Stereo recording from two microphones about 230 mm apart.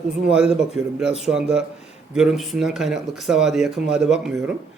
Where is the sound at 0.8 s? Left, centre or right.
Centre.